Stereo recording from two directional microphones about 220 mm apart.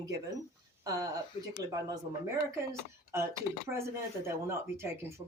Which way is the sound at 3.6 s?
10° right (ahead or behind).